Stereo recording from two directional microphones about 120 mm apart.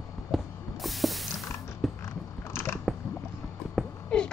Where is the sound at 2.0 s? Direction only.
20° left (ahead or behind).